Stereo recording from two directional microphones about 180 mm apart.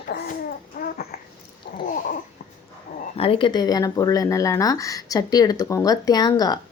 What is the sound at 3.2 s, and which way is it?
Speech, 30° left (ahead or behind).